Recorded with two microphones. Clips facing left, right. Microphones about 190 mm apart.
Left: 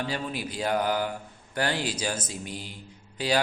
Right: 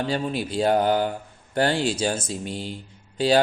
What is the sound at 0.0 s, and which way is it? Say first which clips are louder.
Speech: right 6 dB; 30° right (ahead or behind).